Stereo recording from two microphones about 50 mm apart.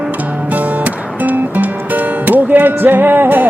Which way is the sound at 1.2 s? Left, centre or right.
Right.